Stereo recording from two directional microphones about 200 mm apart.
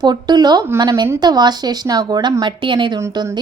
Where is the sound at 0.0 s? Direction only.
20° right (ahead or behind).